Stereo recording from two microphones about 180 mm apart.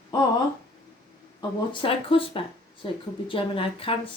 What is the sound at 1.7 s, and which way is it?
A woman's voice, 30° left (ahead or behind).